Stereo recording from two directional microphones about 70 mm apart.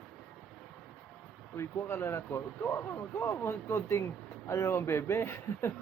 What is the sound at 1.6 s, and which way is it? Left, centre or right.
Speech, left.